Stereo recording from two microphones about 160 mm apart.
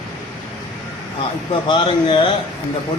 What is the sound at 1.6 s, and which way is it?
Speech, 30° left (ahead or behind).